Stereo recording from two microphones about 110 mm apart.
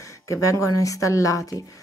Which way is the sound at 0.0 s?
30° left (ahead or behind).